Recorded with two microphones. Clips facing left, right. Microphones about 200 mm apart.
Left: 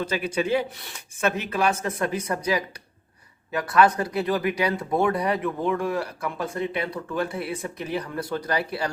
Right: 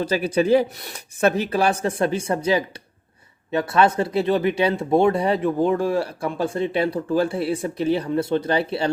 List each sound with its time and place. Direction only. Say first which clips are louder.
0.0 s speech: right 5 dB; 35° right (ahead or behind)